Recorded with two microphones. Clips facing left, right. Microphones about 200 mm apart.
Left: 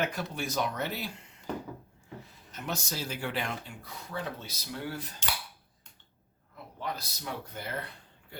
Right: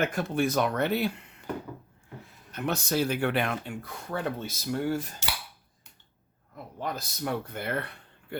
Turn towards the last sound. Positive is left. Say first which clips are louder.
# right 6 dB
turn(degrees=-60)  # may be behind; listen again after turning